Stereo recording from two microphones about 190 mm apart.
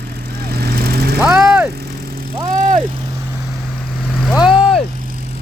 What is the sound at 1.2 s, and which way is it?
Vehicle, 5° right (ahead or behind).